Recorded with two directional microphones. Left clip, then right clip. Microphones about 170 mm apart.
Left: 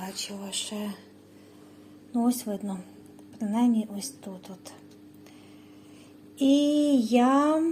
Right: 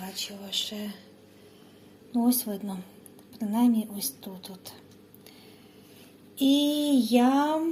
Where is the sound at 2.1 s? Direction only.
10° left (ahead or behind).